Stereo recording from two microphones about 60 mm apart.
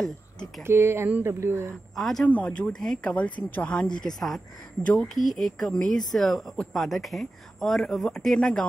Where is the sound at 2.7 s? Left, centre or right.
Centre.